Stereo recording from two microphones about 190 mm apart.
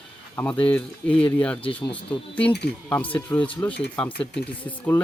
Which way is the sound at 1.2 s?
25° left (ahead or behind).